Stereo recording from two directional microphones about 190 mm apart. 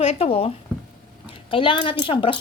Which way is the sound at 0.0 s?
30° left (ahead or behind).